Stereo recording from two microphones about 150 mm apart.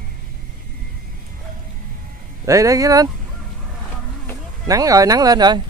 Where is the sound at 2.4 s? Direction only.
20° right (ahead or behind).